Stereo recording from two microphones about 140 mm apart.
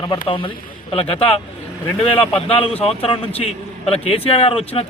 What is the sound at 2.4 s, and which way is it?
A man's voice, 45° left (ahead or behind).